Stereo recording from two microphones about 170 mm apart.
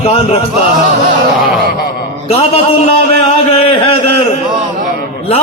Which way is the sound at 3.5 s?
35° left (ahead or behind).